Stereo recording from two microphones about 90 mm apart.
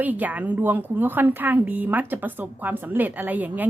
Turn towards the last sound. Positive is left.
turn(degrees=-20)  # may be behind; listen again after turning